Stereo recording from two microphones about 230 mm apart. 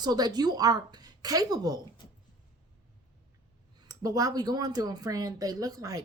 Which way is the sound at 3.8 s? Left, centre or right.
Centre.